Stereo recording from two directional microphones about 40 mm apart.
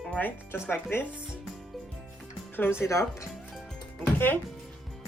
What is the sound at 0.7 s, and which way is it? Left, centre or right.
Speech, left.